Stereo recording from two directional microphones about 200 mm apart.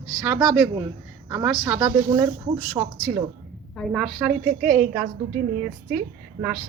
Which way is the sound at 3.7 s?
Centre (ahead or behind).